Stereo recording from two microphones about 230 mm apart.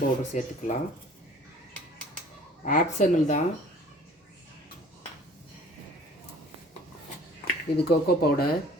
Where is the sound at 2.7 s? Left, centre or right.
Left.